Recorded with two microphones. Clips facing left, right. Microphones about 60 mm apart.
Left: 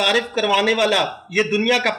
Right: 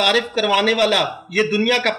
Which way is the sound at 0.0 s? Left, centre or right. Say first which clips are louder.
Right 1 dB; centre.